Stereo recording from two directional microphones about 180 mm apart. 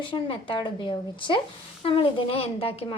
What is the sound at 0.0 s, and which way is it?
A woman's voice, 25° left (ahead or behind).